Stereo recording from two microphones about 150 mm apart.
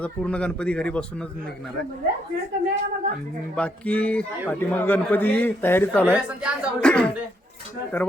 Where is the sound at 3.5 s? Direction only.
10° left (ahead or behind).